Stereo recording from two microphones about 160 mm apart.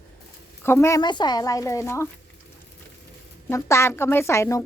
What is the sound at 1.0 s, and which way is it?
Speech, 25° left (ahead or behind).